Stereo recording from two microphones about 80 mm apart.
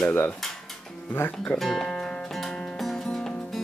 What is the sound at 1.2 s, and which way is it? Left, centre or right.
Speech, left.